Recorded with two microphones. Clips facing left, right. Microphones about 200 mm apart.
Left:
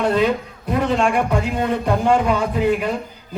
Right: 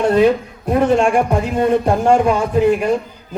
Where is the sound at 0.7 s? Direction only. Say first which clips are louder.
Right 5 dB; 50° right (ahead or behind).